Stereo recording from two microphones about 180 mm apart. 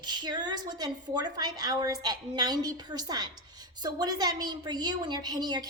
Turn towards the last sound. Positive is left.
turn(degrees=-20)  # may be behind; listen again after turning